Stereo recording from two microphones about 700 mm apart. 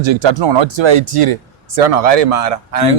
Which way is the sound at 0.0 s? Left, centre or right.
Right.